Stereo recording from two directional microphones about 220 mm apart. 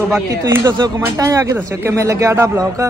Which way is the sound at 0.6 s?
15° right (ahead or behind).